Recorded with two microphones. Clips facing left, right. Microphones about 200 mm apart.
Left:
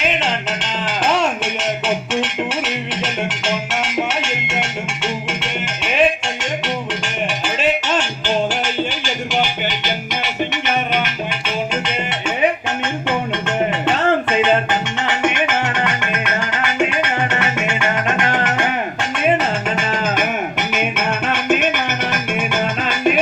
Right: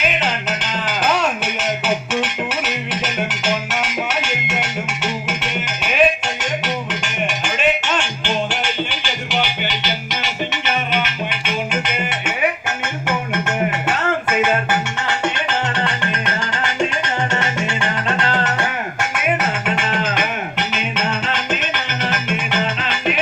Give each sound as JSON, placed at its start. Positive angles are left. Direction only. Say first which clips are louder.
{"t": 0.0, "sound": "music", "louder": "left 1 dB", "side_deg": 30}
{"t": 11.3, "sound": "music", "louder": "left 1 dB", "side_deg": 35}
{"t": 14.3, "sound": "music", "louder": "left 2 dB", "side_deg": 25}
{"t": 18.2, "sound": "music", "louder": "left 1 dB", "side_deg": 15}
{"t": 19.7, "sound": "music", "louder": "left 1 dB", "side_deg": 55}